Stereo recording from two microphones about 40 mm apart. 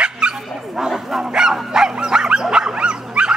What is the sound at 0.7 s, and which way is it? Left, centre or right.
Speech, centre.